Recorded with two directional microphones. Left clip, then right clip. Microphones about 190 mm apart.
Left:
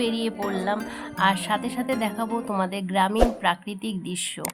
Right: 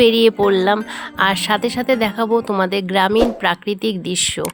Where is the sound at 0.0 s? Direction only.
35° right (ahead or behind).